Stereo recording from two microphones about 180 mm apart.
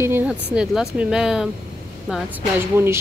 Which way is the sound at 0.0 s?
15° right (ahead or behind).